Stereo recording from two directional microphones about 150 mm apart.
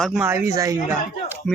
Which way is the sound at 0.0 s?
5° right (ahead or behind).